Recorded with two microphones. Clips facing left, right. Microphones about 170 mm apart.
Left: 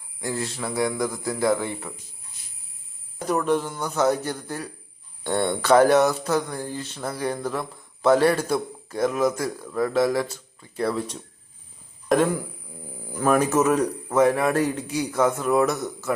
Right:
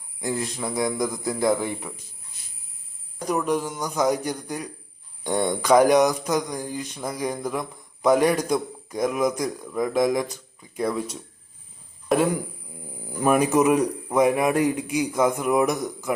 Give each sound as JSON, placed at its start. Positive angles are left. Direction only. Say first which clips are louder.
{"t": 0.2, "sound": "a man's voice", "louder": "right 1 dB", "side_deg": -20}
{"t": 3.2, "sound": "a man's voice", "louder": "left 1 dB", "side_deg": -10}
{"t": 12.0, "sound": "a man's voice", "louder": "left 1 dB", "side_deg": -5}